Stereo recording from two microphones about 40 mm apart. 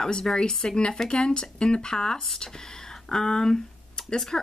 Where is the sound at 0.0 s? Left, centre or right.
Centre.